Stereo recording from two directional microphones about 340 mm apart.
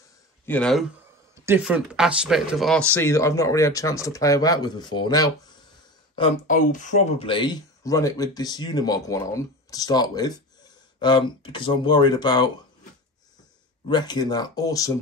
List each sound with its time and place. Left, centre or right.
0.5 s speech: centre
13.8 s speech: centre